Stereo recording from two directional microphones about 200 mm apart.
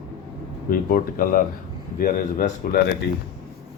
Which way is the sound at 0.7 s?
45° left (ahead or behind).